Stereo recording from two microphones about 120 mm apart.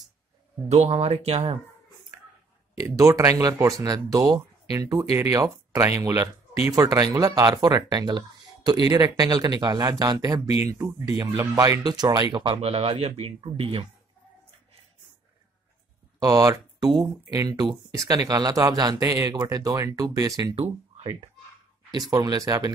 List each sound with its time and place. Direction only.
0.7 s speech: 65° right (ahead or behind)
3.0 s speech: 25° right (ahead or behind)
12.6 s speech: 55° right (ahead or behind)
16.2 s speech: 30° right (ahead or behind)
20.5 s speech: 50° right (ahead or behind)
22.1 s speech: 30° right (ahead or behind)